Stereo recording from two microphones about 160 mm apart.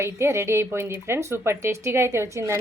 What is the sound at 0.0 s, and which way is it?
A woman's voice, 15° right (ahead or behind).